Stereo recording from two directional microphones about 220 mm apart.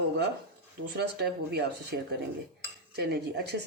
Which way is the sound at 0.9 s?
50° right (ahead or behind).